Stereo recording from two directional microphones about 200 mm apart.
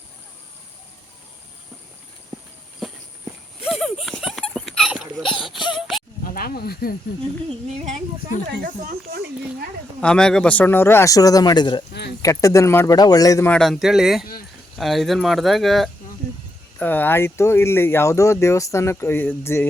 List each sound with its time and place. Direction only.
3.6 s a sound: centre (ahead or behind)
6.2 s speech: 45° left (ahead or behind)
8.6 s speech: 50° right (ahead or behind)
10.0 s speech: 5° left (ahead or behind); by 11.8 s 20° left (ahead or behind)
11.9 s a sound: 55° left (ahead or behind)
12.2 s speech: 15° left (ahead or behind)